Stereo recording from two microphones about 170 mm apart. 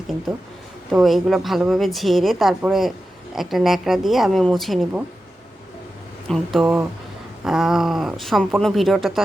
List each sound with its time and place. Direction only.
0.9 s a woman's voice: centre (ahead or behind)
6.2 s a woman's voice: centre (ahead or behind)